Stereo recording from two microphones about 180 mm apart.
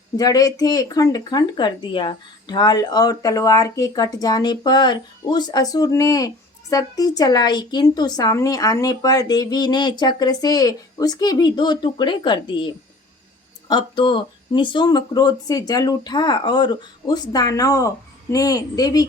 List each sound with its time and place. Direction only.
0.2 s speech: 20° left (ahead or behind)